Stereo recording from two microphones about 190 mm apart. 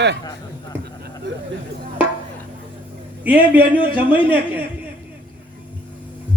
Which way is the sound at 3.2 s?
10° right (ahead or behind).